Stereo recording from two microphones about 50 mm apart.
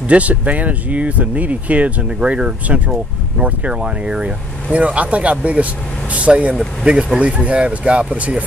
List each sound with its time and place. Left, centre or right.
0.1 s speech: right